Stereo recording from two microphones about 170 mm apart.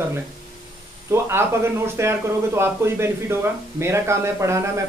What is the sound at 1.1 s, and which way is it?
Speech, 15° right (ahead or behind).